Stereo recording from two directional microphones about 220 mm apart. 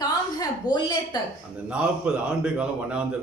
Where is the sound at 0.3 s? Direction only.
20° left (ahead or behind).